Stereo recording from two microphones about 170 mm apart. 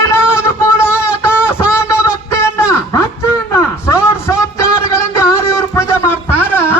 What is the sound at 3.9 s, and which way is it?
Music, 15° left (ahead or behind).